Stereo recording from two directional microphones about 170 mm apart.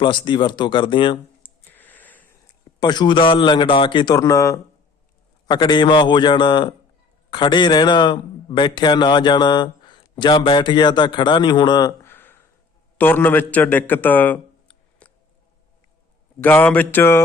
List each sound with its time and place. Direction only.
0.0 s a man's voice: 25° left (ahead or behind)
1.4 s a sound: 10° left (ahead or behind)
2.8 s a man's voice: 25° left (ahead or behind)
12.0 s a sound: 15° left (ahead or behind)
13.0 s a man's voice: 10° left (ahead or behind)
16.4 s speech: 10° left (ahead or behind)